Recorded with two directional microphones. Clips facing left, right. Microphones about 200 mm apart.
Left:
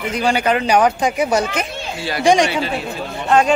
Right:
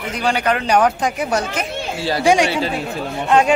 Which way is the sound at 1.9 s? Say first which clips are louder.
Right 3 dB; 35° right (ahead or behind).